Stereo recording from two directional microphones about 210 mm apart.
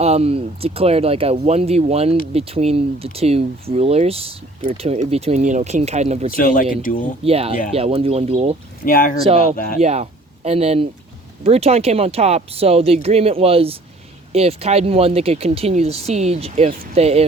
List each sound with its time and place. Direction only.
0.0 s speech: 30° right (ahead or behind)
6.3 s speech: 40° left (ahead or behind)
7.3 s speech: 30° right (ahead or behind)
8.8 s speech: 45° left (ahead or behind)
9.8 s speech: 30° right (ahead or behind)